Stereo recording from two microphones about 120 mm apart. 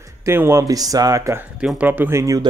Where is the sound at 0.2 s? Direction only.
20° right (ahead or behind).